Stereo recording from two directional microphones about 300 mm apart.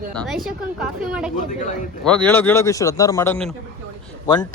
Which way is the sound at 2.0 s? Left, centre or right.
Centre.